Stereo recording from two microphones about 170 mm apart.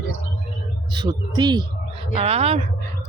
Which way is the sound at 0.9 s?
25° right (ahead or behind).